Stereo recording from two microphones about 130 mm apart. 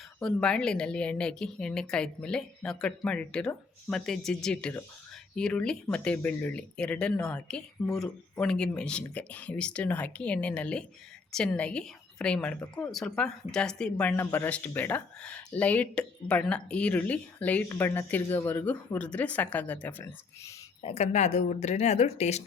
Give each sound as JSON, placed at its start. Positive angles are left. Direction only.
{"t": 0.2, "sound": "speech", "side_deg": 5}
{"t": 20.8, "sound": "speech", "side_deg": 55}